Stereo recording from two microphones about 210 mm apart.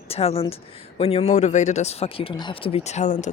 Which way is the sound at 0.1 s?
30° left (ahead or behind).